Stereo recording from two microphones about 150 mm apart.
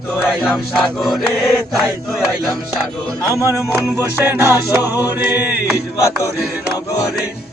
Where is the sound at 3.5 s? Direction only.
15° right (ahead or behind).